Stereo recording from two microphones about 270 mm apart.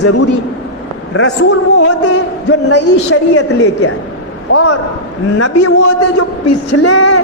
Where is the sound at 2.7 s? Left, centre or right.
Left.